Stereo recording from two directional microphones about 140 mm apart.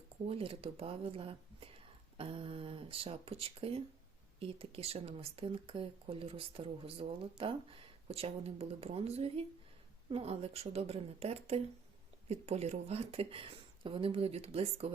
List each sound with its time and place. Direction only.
0.3 s speech: 40° right (ahead or behind)